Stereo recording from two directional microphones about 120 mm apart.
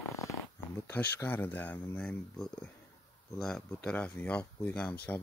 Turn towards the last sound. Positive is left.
turn(degrees=10)  # may be behind; listen again after turning